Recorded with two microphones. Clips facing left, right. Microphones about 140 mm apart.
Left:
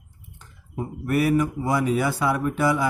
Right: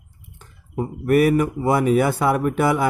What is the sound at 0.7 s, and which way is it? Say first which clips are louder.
Speech: right 6 dB; 55° right (ahead or behind).